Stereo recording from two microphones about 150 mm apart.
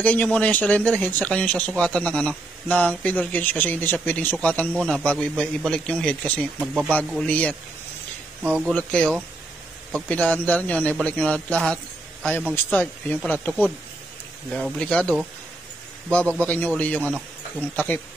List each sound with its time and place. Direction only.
0.0 s speech: 10° left (ahead or behind)
6.6 s speech: 5° right (ahead or behind)
7.1 s speech: 5° left (ahead or behind)
8.6 s a man's voice: 5° left (ahead or behind)
16.3 s speech: 10° left (ahead or behind)